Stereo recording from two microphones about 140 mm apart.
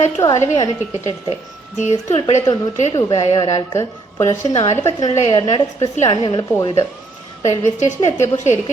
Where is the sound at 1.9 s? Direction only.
55° left (ahead or behind).